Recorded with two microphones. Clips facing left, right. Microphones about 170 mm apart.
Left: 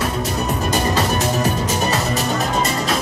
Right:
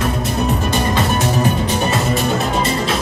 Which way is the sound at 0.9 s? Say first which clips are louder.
Right 2 dB; 40° left (ahead or behind).